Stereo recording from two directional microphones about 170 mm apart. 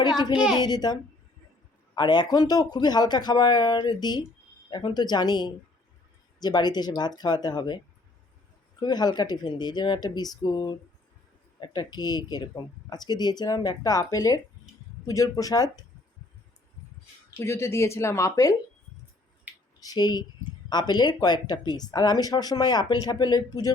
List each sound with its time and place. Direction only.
0.0 s speech: 25° left (ahead or behind)
0.3 s a child's voice: 5° right (ahead or behind)
0.6 s speech: 25° left (ahead or behind)
2.0 s speech: 25° left (ahead or behind)
8.8 s speech: 25° left (ahead or behind)
17.4 s speech: 15° left (ahead or behind)
19.8 s speech: 25° left (ahead or behind)